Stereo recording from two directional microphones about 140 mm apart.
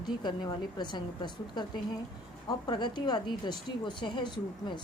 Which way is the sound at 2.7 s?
35° left (ahead or behind).